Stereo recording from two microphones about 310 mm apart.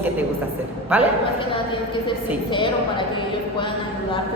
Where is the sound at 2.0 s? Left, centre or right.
Centre.